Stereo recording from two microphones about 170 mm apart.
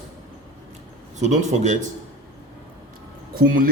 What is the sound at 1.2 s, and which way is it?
Speech, 45° right (ahead or behind).